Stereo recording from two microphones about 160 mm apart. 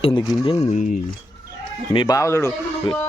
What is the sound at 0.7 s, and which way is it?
Speech, 50° left (ahead or behind).